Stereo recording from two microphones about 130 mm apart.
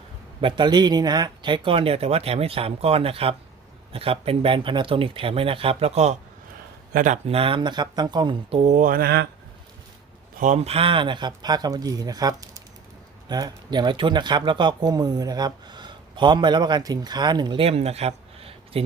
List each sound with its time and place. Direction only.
0.4 s speech: 35° right (ahead or behind); by 6.1 s 55° right (ahead or behind)
6.9 s speech: 75° right (ahead or behind)
7.3 s speech: 45° right (ahead or behind)
8.4 s speech: 55° right (ahead or behind); by 9.0 s 80° right
10.3 s speech: 70° right (ahead or behind); by 18.9 s 45° right (ahead or behind)